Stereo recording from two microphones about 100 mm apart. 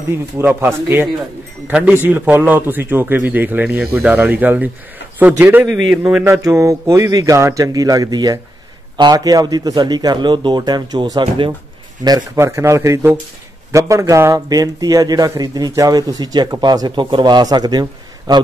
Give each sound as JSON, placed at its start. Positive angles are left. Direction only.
{"t": 0.4, "sound": "a man's voice", "side_deg": -25}
{"t": 5.7, "sound": "a man's voice", "side_deg": 0}
{"t": 6.2, "sound": "a man's voice", "side_deg": -30}
{"t": 12.4, "sound": "a man's voice", "side_deg": -30}